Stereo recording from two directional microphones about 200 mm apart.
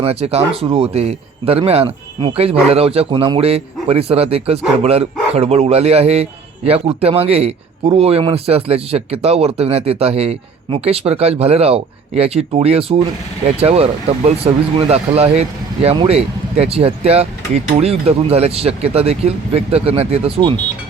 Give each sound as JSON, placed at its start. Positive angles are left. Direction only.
{"t": 0.0, "sound": "speech", "side_deg": -30}